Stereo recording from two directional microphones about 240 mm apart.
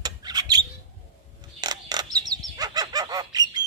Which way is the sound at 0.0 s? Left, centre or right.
Centre.